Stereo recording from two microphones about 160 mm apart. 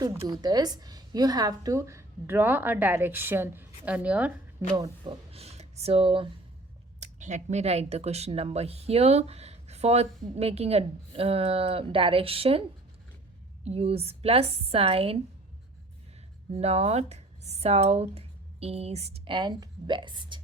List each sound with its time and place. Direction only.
0.3 s a woman's voice: 25° right (ahead or behind); by 4.3 s 10° right (ahead or behind)
4.7 s speech: 30° right (ahead or behind)
7.0 s speech: 50° right (ahead or behind)
13.7 s speech: 40° right (ahead or behind)
16.6 s speech: 40° right (ahead or behind)